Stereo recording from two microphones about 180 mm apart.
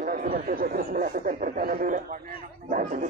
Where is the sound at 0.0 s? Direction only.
50° right (ahead or behind).